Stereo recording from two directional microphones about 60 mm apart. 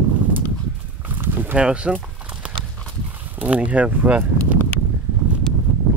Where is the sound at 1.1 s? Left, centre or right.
Right.